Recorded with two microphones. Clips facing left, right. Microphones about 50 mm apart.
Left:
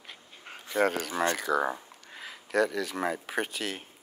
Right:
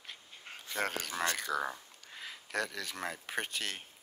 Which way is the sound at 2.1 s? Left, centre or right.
Centre.